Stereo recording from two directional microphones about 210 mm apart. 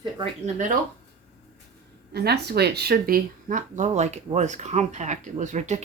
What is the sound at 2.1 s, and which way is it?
Speech, 50° right (ahead or behind).